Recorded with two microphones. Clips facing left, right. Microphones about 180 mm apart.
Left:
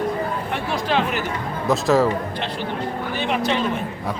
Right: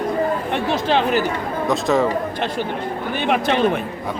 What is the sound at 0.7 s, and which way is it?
Speech, 30° right (ahead or behind).